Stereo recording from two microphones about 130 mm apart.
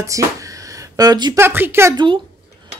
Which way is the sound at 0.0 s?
25° right (ahead or behind).